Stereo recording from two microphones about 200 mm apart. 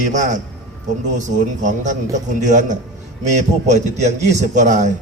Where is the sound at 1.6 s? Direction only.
35° right (ahead or behind).